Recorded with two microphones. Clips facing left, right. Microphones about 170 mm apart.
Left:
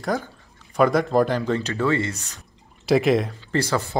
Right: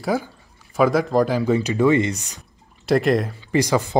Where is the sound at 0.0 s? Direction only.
5° right (ahead or behind).